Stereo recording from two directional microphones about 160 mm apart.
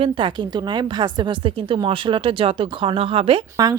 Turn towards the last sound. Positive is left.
turn(degrees=-25)  # may be behind; listen again after turning